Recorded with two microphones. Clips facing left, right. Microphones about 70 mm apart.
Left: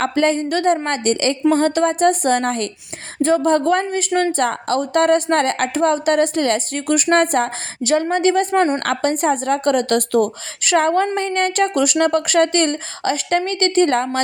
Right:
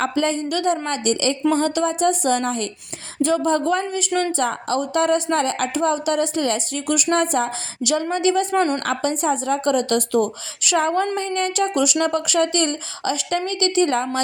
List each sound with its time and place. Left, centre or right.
0.0 s a woman's voice: left
3.2 s a woman's voice: left
4.9 s a woman's voice: left
6.8 s a woman's voice: left
7.8 s a woman's voice: left